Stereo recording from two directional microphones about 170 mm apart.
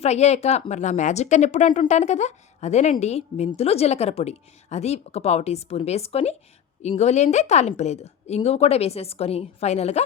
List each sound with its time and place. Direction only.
0.0 s a woman's voice: 40° left (ahead or behind)